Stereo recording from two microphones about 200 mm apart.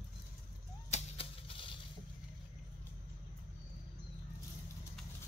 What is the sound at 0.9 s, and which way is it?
Typewriter, 25° left (ahead or behind).